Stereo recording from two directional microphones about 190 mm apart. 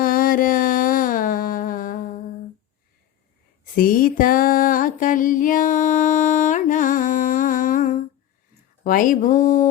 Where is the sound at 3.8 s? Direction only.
50° left (ahead or behind).